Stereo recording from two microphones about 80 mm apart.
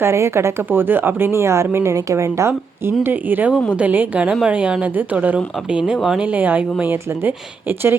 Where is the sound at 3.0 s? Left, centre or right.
Right; by 6.2 s centre.